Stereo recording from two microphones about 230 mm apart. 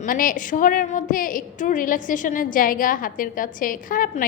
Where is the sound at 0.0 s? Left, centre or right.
Left.